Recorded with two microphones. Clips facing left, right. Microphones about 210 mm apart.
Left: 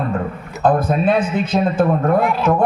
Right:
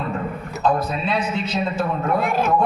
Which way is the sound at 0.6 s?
50° left (ahead or behind).